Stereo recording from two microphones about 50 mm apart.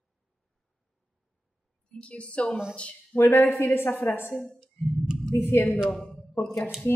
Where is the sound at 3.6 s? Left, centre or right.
Left.